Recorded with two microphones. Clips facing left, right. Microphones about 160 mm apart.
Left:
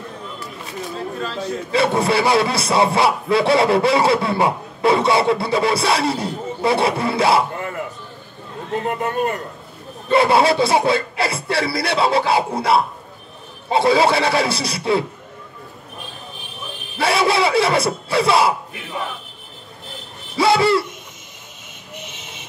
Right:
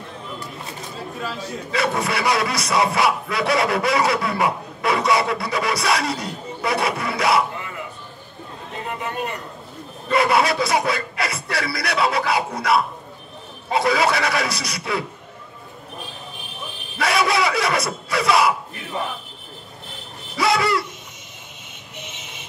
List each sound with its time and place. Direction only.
1.7 s a man's voice: 30° left (ahead or behind)
7.5 s a sound: 50° left (ahead or behind)
8.8 s a man's voice: 45° left (ahead or behind)
10.0 s a man's voice: 30° left (ahead or behind)
17.0 s a man's voice: 30° left (ahead or behind)
20.3 s owl: 30° left (ahead or behind)